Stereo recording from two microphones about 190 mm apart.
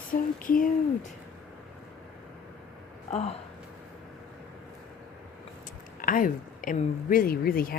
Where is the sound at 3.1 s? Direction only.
35° left (ahead or behind).